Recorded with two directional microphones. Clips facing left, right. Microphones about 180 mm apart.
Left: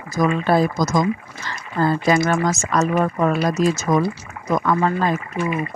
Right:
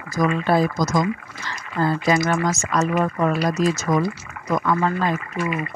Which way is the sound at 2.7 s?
50° left (ahead or behind).